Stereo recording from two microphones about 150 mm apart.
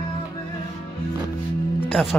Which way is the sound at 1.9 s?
Centre (ahead or behind).